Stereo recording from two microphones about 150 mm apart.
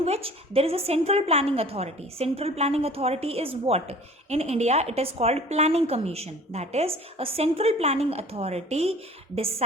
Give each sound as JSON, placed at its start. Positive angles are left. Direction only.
{"t": 0.0, "sound": "a woman's voice", "side_deg": -40}